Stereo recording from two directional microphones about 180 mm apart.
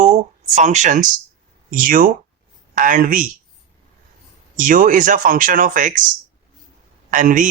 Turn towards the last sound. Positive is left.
turn(degrees=-45)  # may be behind; listen again after turning